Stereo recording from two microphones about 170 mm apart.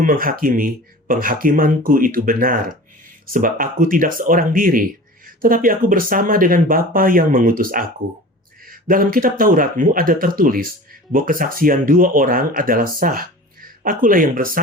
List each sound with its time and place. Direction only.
0.0 s speech: 55° right (ahead or behind)